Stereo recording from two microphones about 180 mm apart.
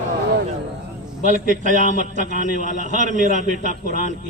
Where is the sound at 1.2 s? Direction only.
45° right (ahead or behind).